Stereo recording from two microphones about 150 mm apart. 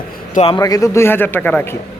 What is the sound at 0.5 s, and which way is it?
Speech, 25° left (ahead or behind).